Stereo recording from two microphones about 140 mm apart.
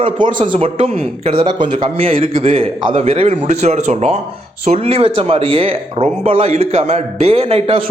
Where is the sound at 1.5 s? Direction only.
35° right (ahead or behind).